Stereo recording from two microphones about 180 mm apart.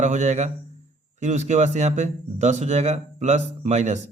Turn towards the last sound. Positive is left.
turn(degrees=-40)  # may be behind; listen again after turning